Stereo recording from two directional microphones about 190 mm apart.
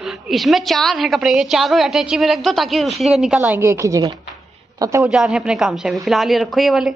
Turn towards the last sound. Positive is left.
turn(degrees=0)  # may be behind; listen again after turning